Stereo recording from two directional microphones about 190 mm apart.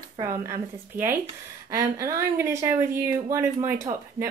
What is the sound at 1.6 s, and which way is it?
Speech, 15° right (ahead or behind).